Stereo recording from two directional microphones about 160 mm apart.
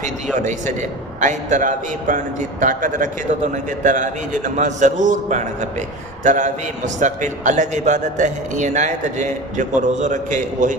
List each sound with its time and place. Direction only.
0.3 s a man's voice: 50° right (ahead or behind)